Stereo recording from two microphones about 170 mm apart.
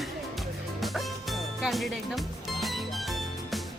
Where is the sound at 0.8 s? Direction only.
Centre (ahead or behind).